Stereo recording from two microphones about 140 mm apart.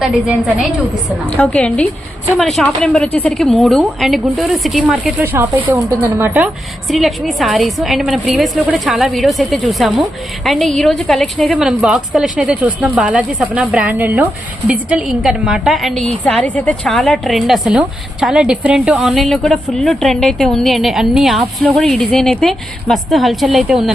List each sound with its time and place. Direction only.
0.0 s a woman's voice: 5° right (ahead or behind)
1.4 s a woman's voice: 10° left (ahead or behind)
5.2 s a woman's voice: 15° right (ahead or behind)
6.8 s a woman's voice: centre (ahead or behind)